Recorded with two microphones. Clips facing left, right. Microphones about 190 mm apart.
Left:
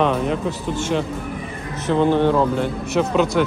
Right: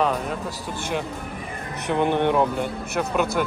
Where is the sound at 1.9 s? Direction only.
15° right (ahead or behind).